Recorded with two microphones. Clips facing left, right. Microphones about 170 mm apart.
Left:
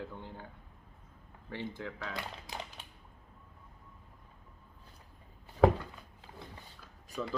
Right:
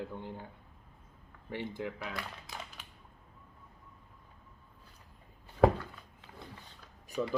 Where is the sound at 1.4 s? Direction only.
15° right (ahead or behind).